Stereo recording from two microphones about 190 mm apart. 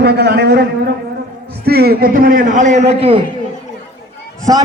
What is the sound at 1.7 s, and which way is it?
A man's voice, 55° right (ahead or behind).